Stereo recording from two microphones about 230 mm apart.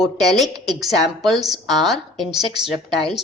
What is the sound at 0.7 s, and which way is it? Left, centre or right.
Speech, centre.